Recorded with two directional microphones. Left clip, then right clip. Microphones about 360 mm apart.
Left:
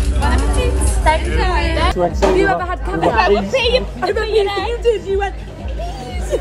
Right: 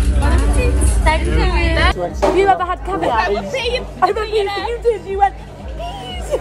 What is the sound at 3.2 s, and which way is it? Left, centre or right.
Speech, centre.